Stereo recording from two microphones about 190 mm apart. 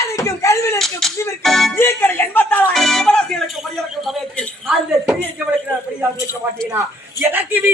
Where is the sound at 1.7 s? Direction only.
15° left (ahead or behind).